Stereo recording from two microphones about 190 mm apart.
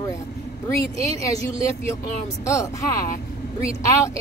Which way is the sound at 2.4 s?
15° left (ahead or behind).